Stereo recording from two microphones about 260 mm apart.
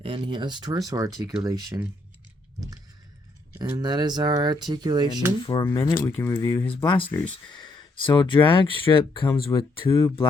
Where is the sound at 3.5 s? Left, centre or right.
Centre.